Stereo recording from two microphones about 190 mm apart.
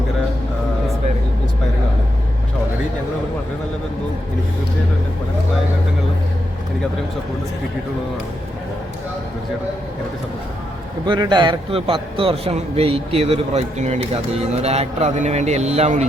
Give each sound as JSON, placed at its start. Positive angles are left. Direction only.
{"t": 11.0, "sound": "a man's voice", "side_deg": -25}